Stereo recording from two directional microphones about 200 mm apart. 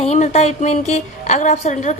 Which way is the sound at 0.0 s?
35° left (ahead or behind).